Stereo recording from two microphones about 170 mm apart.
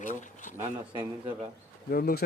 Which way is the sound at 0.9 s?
30° right (ahead or behind).